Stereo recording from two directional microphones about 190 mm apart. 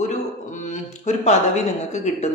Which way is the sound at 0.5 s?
40° left (ahead or behind).